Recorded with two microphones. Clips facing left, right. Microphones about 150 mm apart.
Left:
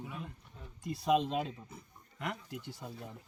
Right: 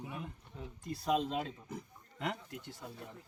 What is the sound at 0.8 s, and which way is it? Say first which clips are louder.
Speech: left 3 dB; 5° left (ahead or behind).